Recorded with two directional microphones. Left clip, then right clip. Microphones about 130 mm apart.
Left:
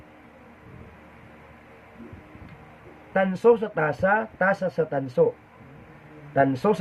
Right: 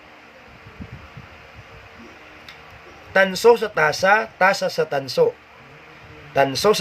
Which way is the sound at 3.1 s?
25° right (ahead or behind).